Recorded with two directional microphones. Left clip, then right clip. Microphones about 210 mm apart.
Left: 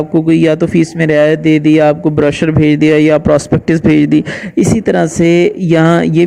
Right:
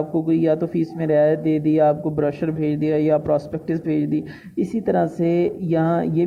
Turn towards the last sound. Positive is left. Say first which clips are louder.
# left 11 dB
turn(degrees=40)  # may be behind; listen again after turning